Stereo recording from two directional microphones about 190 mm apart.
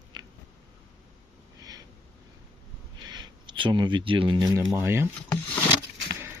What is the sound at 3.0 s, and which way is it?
Speech, 20° right (ahead or behind).